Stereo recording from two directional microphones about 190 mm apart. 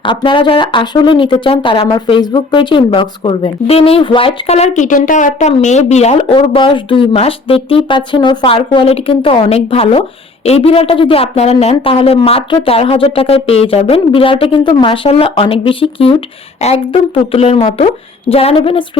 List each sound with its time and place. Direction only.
0.0 s a woman's voice: 25° left (ahead or behind)